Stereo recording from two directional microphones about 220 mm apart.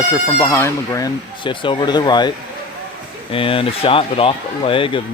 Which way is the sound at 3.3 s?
25° left (ahead or behind).